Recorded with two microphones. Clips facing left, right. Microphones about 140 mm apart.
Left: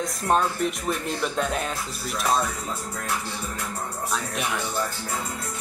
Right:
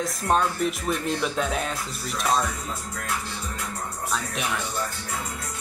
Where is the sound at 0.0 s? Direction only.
Centre (ahead or behind).